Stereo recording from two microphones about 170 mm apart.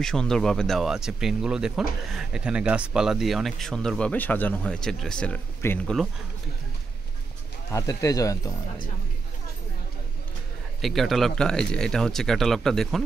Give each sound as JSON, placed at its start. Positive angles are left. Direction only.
{"t": 0.0, "sound": "speech", "side_deg": 5}
{"t": 7.7, "sound": "speech", "side_deg": 20}
{"t": 10.8, "sound": "speech", "side_deg": 0}